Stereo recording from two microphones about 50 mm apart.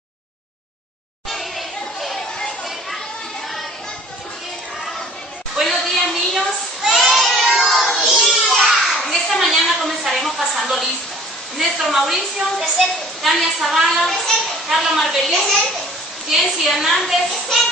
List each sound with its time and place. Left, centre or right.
2.0 s chatter: centre
5.6 s a sound: centre
7.5 s music: centre
8.0 s children playing: centre
8.5 s a sound: centre
11.5 s a woman's voice: centre